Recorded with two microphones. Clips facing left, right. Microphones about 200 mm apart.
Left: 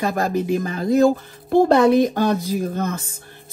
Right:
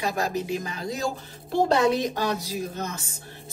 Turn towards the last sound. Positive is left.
turn(degrees=55)  # may be behind; listen again after turning